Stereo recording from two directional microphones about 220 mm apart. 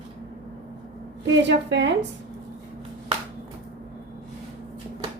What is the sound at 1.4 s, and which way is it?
Speech, 55° right (ahead or behind).